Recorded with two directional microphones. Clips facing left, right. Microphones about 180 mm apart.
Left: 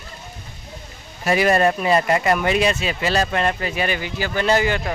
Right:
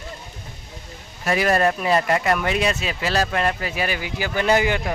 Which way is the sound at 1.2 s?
5° left (ahead or behind).